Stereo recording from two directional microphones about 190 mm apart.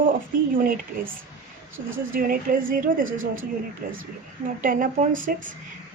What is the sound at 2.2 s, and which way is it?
A woman's voice, 50° right (ahead or behind).